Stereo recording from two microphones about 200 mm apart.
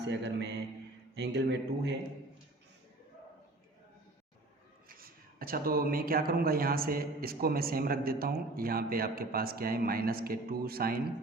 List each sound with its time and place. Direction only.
0.0 s a man's voice: 60° right (ahead or behind)
4.9 s speech: 45° right (ahead or behind)